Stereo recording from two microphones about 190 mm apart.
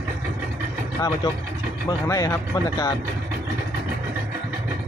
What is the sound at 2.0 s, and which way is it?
Speech, 15° left (ahead or behind).